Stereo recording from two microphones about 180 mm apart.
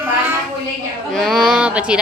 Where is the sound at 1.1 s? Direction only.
Centre (ahead or behind).